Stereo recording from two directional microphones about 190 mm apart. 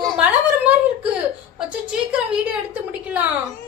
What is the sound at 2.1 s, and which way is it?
Speech, 5° right (ahead or behind).